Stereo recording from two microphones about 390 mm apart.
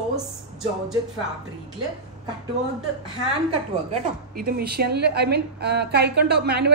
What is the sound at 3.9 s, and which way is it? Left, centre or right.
A woman's voice, right.